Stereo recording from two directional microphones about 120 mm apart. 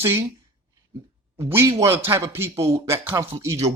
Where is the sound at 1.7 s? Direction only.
30° right (ahead or behind).